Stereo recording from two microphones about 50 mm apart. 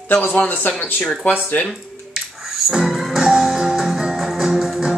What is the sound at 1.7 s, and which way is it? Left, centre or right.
Music, centre.